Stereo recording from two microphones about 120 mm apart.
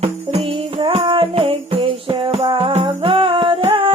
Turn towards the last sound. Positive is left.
turn(degrees=-45)  # may be behind; listen again after turning